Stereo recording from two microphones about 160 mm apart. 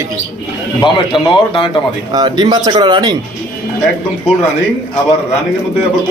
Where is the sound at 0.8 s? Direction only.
30° left (ahead or behind).